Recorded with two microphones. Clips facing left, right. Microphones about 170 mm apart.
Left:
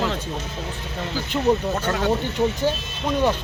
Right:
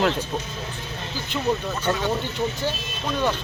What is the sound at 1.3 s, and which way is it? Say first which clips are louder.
Speech: left 4 dB; 30° left (ahead or behind).